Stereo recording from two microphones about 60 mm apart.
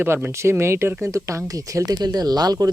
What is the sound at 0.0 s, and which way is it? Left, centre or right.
Speech, right.